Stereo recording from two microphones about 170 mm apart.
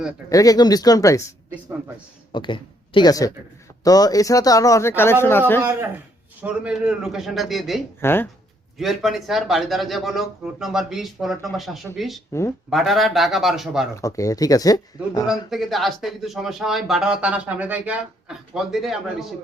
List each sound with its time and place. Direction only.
0.3 s a man's voice: 20° left (ahead or behind)
2.3 s a man's voice: 30° left (ahead or behind); by 5.6 s 10° left (ahead or behind)
6.4 s speech: 5° right (ahead or behind)
8.0 s speech: 15° left (ahead or behind)
8.8 s speech: centre (ahead or behind)
12.3 s speech: 15° left (ahead or behind)
12.7 s speech: centre (ahead or behind)
13.9 s a man's voice: 20° left (ahead or behind)
15.3 s speech: centre (ahead or behind)